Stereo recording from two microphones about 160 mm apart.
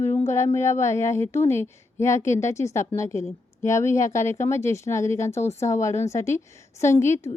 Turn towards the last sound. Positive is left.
turn(degrees=15)  # may be behind; listen again after turning